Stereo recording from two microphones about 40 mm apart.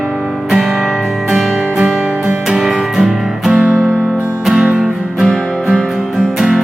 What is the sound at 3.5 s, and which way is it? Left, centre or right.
Music, right.